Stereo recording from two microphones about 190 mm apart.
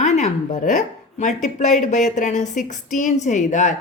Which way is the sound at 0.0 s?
35° left (ahead or behind).